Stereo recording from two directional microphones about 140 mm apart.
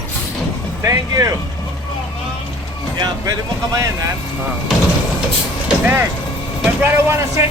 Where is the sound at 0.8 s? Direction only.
25° right (ahead or behind).